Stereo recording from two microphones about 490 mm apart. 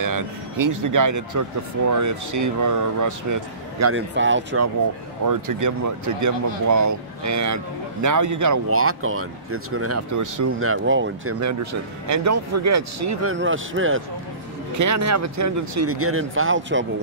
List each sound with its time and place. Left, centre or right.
0.0 s speech: right
3.9 s speech: right
5.2 s speech: right
10.6 s speech: right
14.8 s speech: right